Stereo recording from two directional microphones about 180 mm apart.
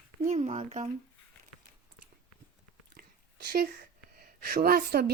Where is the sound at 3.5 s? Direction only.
55° right (ahead or behind).